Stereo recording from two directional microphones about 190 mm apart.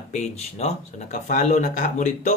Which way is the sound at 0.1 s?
35° left (ahead or behind).